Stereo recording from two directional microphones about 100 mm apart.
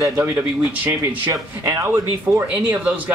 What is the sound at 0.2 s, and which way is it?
Speech, 20° right (ahead or behind).